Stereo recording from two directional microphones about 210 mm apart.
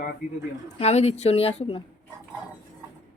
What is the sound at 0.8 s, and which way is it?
Speech, 30° left (ahead or behind).